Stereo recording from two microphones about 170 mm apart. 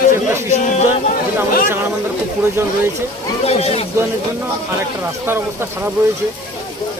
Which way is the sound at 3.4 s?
35° left (ahead or behind).